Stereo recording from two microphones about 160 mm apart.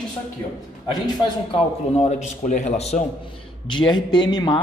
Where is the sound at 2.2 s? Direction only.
45° left (ahead or behind).